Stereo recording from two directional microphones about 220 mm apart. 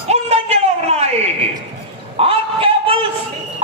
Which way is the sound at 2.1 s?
25° right (ahead or behind).